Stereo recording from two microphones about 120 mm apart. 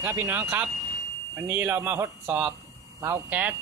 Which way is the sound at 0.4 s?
10° right (ahead or behind).